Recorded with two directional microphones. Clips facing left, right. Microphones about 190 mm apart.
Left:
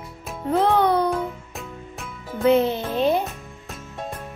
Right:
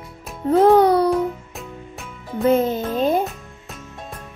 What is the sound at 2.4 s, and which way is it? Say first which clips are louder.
Music: right 1 dB; 45° right (ahead or behind).